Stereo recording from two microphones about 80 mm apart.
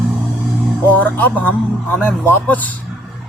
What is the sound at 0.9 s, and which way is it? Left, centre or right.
Speech, left.